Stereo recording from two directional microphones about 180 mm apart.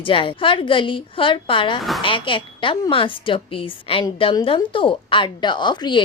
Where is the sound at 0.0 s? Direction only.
30° left (ahead or behind).